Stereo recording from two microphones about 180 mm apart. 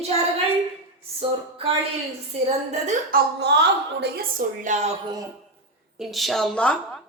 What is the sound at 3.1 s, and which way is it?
A woman's voice, 70° right (ahead or behind).